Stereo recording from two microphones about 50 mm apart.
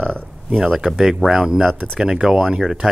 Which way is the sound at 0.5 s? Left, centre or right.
Centre.